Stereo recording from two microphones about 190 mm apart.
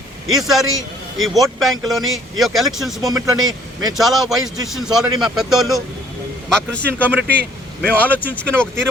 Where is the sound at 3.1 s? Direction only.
20° right (ahead or behind).